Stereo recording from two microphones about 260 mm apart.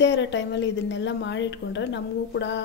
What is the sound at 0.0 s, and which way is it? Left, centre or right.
A woman's voice, left.